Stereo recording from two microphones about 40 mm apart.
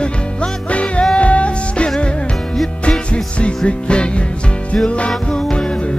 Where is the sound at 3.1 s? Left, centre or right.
Left.